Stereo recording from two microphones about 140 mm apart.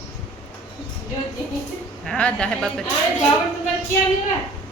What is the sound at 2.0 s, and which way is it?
Speech, 10° left (ahead or behind).